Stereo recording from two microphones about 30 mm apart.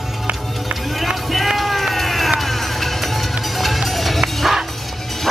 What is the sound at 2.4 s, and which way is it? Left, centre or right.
Music, centre.